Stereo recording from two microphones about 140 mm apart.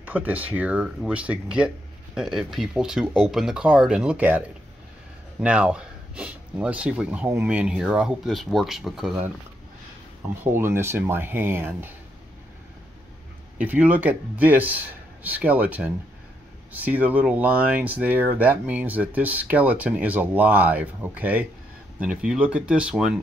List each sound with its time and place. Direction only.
0.0 s speech: 10° right (ahead or behind)
10.4 s speech: 15° right (ahead or behind)
13.6 s speech: 10° right (ahead or behind)